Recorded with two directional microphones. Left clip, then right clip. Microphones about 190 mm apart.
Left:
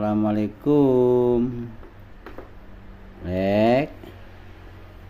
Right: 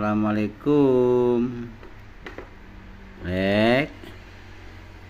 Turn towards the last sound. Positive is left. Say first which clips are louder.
# left 1 dB
turn(degrees=10)  # may be behind; listen again after turning